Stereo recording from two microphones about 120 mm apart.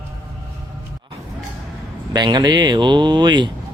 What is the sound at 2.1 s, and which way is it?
Speech, 35° right (ahead or behind).